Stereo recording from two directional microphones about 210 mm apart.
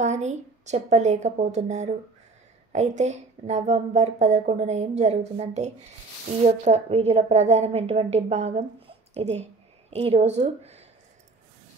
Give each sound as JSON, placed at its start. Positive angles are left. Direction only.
{"t": 0.0, "sound": "a woman's voice", "side_deg": -35}